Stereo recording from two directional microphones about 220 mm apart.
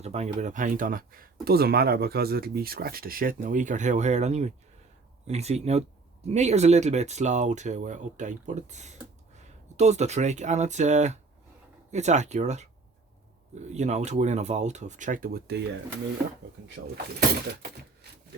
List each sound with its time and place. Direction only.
0.0 s speech: 30° right (ahead or behind)
13.7 s speech: 30° right (ahead or behind)